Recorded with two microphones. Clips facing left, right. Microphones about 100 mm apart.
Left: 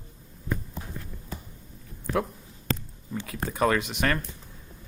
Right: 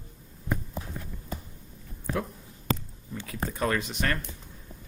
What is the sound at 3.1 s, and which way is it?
Speech, 75° left (ahead or behind).